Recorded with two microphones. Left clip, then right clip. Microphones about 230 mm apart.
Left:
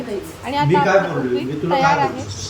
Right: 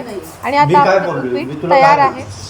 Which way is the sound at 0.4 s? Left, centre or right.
Right.